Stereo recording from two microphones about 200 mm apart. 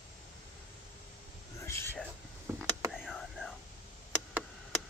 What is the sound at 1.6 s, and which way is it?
Whispering, 10° left (ahead or behind).